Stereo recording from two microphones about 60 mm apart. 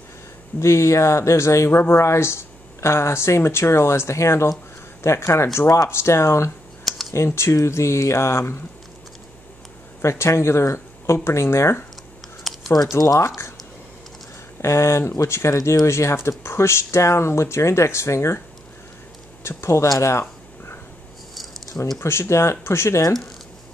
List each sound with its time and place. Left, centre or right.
0.6 s speech: left
10.0 s speech: left
12.5 s typing: centre
14.6 s speech: left
19.4 s speech: left
20.1 s a sound: left
21.9 s speech: left